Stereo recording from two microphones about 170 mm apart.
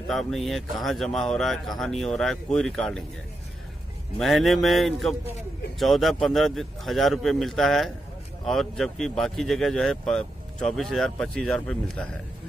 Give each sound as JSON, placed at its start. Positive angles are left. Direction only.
{"t": 0.1, "sound": "speech", "side_deg": 0}
{"t": 4.2, "sound": "speech", "side_deg": 0}